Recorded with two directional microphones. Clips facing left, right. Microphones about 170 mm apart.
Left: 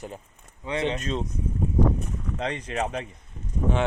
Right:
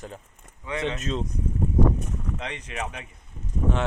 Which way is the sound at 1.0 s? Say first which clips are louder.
Even; centre (ahead or behind).